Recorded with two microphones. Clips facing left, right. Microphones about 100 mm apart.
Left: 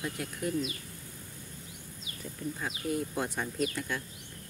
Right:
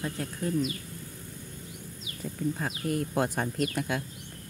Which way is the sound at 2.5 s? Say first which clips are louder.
Right 3 dB; 50° right (ahead or behind).